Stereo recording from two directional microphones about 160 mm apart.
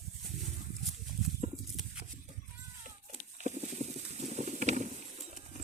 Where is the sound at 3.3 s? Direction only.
45° right (ahead or behind).